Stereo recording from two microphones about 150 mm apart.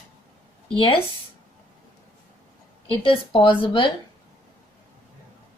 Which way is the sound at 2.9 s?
35° left (ahead or behind).